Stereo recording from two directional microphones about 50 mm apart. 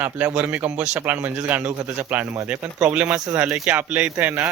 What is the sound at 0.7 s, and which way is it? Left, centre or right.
Speech, centre.